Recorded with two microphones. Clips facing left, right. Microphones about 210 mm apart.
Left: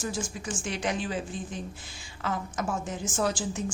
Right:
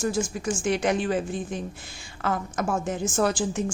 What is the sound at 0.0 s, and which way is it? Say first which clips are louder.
A woman's voice: right 7 dB; 55° right (ahead or behind).